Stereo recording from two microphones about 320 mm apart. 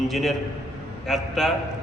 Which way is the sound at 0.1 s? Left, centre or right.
Centre.